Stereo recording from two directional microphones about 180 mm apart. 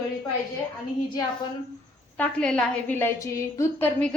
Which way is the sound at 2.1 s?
5° left (ahead or behind).